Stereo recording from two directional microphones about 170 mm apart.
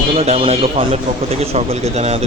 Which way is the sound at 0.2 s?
35° right (ahead or behind).